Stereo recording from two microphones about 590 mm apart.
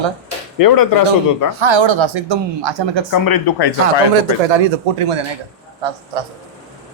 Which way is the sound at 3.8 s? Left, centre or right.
Right.